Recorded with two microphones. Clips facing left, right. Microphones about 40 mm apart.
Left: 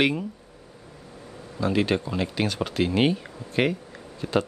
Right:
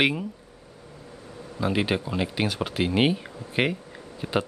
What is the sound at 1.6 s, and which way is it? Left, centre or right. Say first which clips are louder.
Speech: left 2 dB; centre.